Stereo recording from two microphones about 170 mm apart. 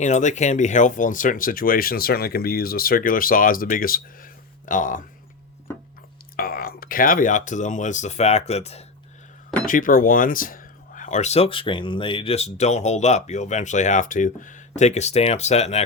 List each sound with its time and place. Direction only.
0.0 s speech: 45° left (ahead or behind)
6.3 s speech: 60° left (ahead or behind); by 8.8 s 40° left (ahead or behind)
9.6 s speech: 55° left (ahead or behind)